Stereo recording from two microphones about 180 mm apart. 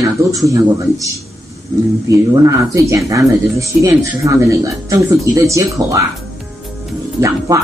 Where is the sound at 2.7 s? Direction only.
15° right (ahead or behind).